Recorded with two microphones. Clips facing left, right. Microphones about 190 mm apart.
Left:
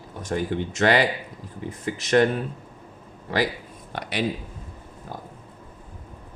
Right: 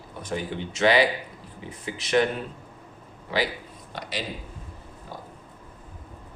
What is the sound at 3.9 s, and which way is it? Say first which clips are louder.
Speech: left 6 dB; 55° left (ahead or behind).